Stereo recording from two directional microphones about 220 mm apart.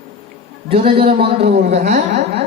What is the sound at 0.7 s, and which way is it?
A man's voice, 25° right (ahead or behind).